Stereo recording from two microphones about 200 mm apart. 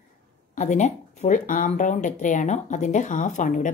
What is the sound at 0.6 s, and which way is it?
Speech, 35° left (ahead or behind).